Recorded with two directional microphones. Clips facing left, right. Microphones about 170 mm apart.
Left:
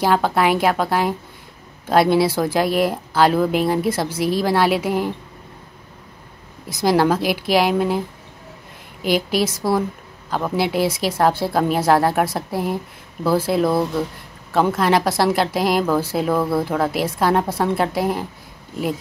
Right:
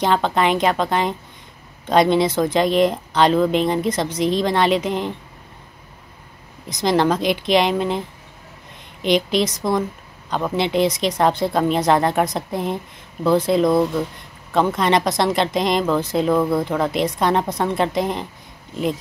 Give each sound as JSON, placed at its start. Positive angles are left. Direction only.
{"t": 0.0, "sound": "speech", "side_deg": 5}
{"t": 6.7, "sound": "speech", "side_deg": 5}
{"t": 9.0, "sound": "speech", "side_deg": 5}